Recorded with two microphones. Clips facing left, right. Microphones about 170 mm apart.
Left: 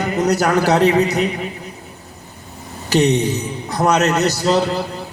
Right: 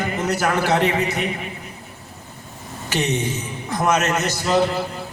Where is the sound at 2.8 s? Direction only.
35° left (ahead or behind).